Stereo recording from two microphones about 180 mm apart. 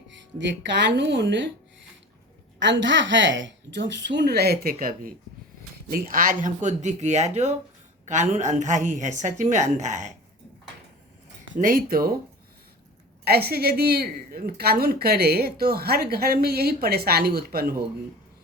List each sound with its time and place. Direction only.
0.1 s speech: 80° right
2.6 s a woman's voice: 90° right; by 10.1 s 40° right (ahead or behind)
11.5 s speech: 50° right (ahead or behind)
13.2 s a woman's voice: 60° right (ahead or behind)